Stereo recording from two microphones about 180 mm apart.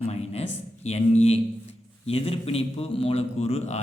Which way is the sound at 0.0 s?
35° left (ahead or behind).